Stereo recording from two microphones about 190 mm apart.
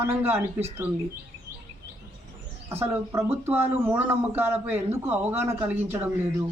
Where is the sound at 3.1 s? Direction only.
10° right (ahead or behind).